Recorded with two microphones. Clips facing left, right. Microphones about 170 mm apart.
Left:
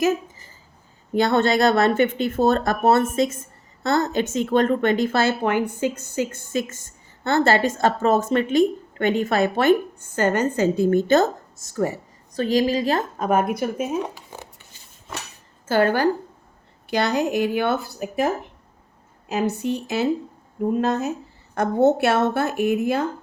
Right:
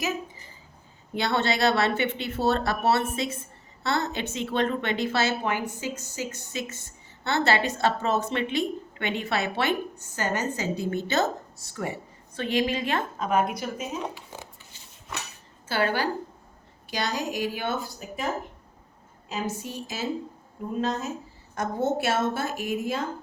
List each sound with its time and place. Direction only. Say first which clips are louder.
1.1 s a woman's voice: left 7 dB; 50° left (ahead or behind)
15.6 s a woman's voice: left 7 dB; 45° left (ahead or behind)
16.9 s a woman's voice: left 8 dB; 60° left (ahead or behind)
19.3 s a woman's voice: left 9 dB; 65° left (ahead or behind)
21.5 s a woman's voice: left 9 dB; 65° left (ahead or behind)